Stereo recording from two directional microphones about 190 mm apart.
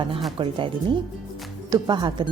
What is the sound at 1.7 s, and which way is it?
Speech, 20° right (ahead or behind).